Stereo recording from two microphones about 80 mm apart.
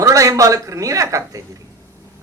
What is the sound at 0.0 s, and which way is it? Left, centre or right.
A man's voice, right.